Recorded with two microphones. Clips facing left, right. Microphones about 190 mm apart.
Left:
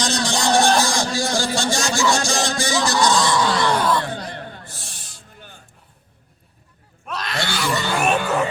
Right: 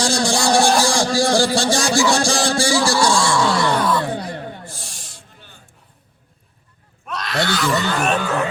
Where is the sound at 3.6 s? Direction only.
5° right (ahead or behind).